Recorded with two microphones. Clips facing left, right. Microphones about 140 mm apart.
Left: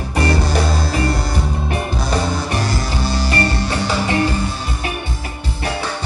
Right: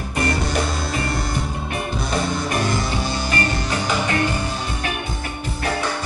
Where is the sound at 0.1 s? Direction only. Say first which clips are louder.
Left 4 dB; 35° left (ahead or behind).